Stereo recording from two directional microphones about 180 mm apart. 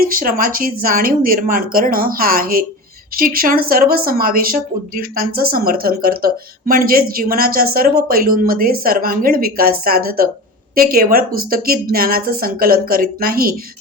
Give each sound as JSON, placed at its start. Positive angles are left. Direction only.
{"t": 0.0, "sound": "a woman's voice", "side_deg": -50}